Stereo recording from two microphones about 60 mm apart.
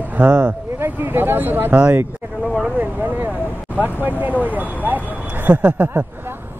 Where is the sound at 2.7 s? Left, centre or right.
Right.